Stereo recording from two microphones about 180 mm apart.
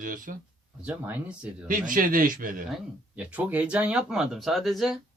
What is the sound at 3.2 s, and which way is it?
Speech, 5° right (ahead or behind).